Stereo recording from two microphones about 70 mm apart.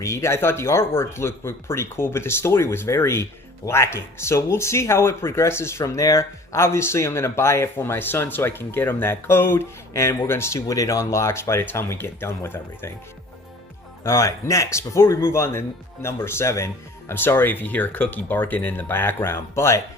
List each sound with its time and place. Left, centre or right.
0.0 s speech: left
14.0 s speech: left
17.2 s speech: left